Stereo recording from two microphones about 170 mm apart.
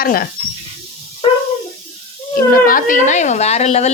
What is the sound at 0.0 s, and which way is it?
Speech, 60° left (ahead or behind).